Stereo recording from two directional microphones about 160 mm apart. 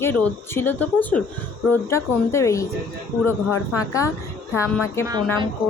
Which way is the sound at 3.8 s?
20° left (ahead or behind).